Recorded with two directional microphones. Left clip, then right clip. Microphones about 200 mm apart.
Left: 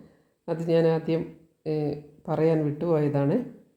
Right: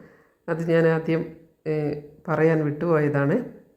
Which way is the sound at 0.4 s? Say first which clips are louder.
Right 2 dB; 15° left (ahead or behind).